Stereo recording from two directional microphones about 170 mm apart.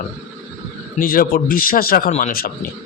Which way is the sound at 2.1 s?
45° left (ahead or behind).